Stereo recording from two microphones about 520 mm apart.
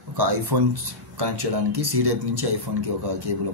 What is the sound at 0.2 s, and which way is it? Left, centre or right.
Speech, right.